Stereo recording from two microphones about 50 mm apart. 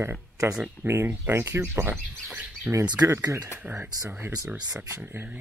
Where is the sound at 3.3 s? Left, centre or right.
Right.